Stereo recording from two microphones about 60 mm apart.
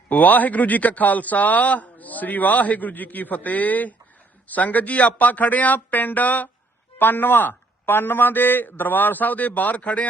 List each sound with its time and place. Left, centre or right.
0.1 s a man's voice: left